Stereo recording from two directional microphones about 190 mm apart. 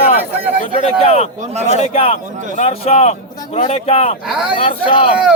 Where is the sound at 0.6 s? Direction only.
35° left (ahead or behind).